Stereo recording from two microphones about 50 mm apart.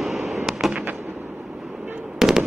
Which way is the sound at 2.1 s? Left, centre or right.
Centre.